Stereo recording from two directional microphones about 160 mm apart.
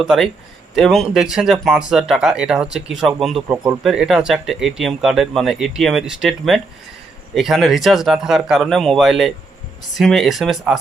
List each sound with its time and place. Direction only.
0.0 s speech: centre (ahead or behind)
3.5 s speech: 15° right (ahead or behind)
3.8 s speech: 5° right (ahead or behind)